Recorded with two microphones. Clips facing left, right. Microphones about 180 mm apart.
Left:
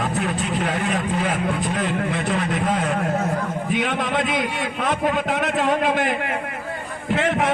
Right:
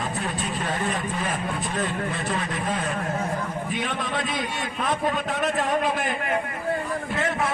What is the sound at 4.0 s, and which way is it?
A man's voice, 60° left (ahead or behind).